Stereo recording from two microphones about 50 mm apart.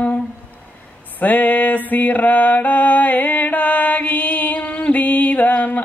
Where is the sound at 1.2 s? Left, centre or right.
Left.